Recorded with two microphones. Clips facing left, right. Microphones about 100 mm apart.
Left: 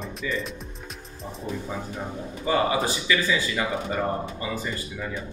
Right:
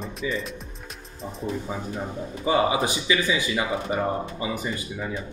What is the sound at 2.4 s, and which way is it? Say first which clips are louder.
Speech: right 1 dB; 15° right (ahead or behind).